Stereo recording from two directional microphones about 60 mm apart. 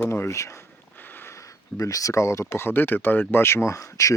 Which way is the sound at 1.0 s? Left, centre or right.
Left.